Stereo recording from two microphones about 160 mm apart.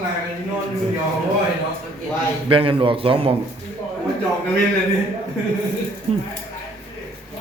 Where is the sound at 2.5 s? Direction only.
35° right (ahead or behind).